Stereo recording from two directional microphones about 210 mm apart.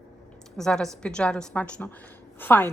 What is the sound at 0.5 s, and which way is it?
A woman's voice, centre (ahead or behind).